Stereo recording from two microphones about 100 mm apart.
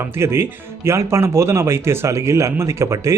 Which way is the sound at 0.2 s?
25° right (ahead or behind).